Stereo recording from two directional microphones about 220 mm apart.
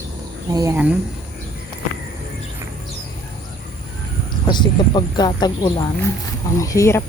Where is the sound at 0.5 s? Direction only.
15° right (ahead or behind).